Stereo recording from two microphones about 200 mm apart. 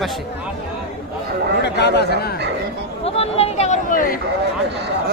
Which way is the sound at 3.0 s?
30° left (ahead or behind).